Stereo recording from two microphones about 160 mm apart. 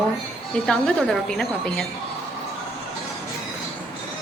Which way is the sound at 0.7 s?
5° left (ahead or behind).